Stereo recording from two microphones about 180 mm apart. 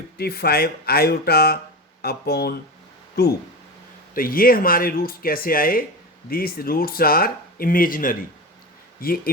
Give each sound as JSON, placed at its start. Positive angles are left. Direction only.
{"t": 0.2, "sound": "speech", "side_deg": 60}
{"t": 4.1, "sound": "speech", "side_deg": 55}